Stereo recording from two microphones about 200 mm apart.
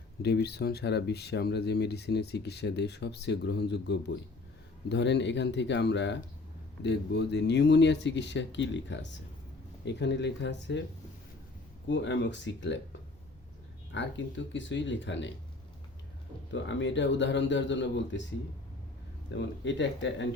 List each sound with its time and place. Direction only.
0.2 s speech: 55° left (ahead or behind)
11.9 s speech: 60° left (ahead or behind)
13.9 s speech: 65° left (ahead or behind)
16.5 s speech: 65° left (ahead or behind)
19.3 s speech: 65° left (ahead or behind)